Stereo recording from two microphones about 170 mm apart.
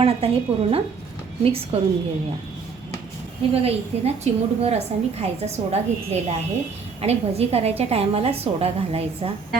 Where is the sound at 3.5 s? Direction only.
35° right (ahead or behind).